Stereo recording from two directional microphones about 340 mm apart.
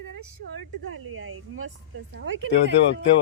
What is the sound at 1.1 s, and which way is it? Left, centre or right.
Speech, right.